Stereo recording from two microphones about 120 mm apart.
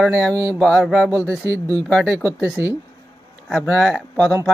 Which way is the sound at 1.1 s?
25° right (ahead or behind).